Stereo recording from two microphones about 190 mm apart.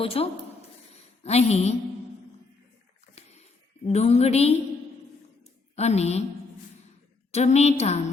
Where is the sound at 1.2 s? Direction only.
35° left (ahead or behind).